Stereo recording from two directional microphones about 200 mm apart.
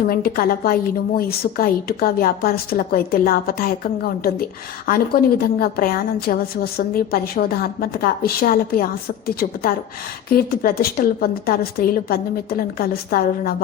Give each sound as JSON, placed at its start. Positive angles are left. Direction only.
{"t": 0.1, "sound": "a woman's voice", "side_deg": 45}
{"t": 4.9, "sound": "a woman's voice", "side_deg": 45}